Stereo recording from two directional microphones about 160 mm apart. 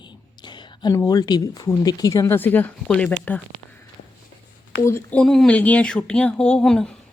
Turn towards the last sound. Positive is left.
turn(degrees=5)  # may be behind; listen again after turning